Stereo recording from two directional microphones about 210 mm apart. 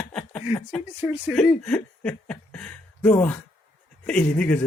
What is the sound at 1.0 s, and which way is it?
Speech, 10° right (ahead or behind).